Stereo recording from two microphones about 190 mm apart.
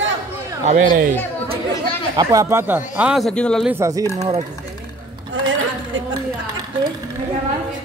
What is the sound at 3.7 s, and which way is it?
Speech, 15° right (ahead or behind).